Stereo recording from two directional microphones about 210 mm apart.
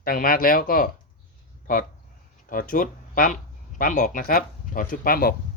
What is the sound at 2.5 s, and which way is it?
Speech, 40° left (ahead or behind).